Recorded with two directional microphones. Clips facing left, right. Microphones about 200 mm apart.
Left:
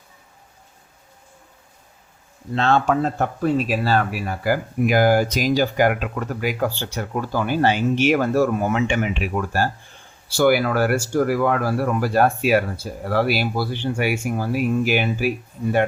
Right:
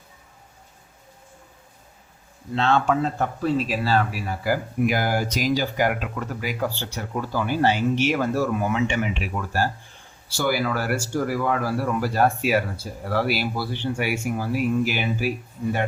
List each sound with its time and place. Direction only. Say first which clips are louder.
2.6 s speech: left 2 dB; 40° left (ahead or behind); by 15.3 s 60° left (ahead or behind)